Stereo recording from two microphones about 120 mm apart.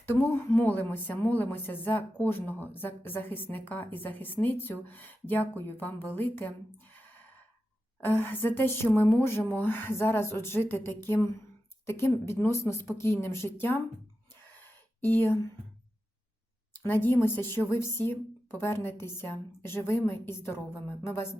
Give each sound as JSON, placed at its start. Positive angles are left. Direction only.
{"t": 0.0, "sound": "a woman's voice", "side_deg": 20}
{"t": 8.0, "sound": "a woman's voice", "side_deg": 15}
{"t": 14.6, "sound": "a sound", "side_deg": 15}
{"t": 16.7, "sound": "a woman's voice", "side_deg": 15}